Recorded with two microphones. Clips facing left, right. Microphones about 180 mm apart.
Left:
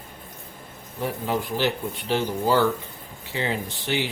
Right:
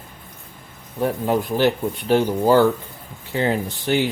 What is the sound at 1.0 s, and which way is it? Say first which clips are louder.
Speech: right 6 dB; 50° right (ahead or behind).